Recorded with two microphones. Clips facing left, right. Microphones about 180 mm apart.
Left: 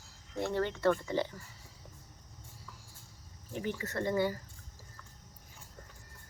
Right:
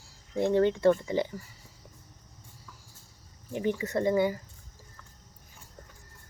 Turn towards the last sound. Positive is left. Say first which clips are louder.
# right 6 dB
turn(degrees=-15)  # may be behind; listen again after turning